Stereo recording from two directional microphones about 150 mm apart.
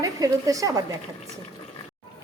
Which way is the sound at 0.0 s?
25° right (ahead or behind).